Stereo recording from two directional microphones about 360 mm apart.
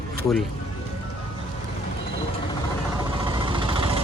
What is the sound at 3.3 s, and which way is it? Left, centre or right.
Vehicle, centre.